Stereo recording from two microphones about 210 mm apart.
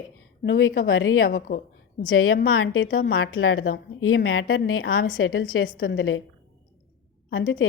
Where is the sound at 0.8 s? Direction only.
75° left (ahead or behind).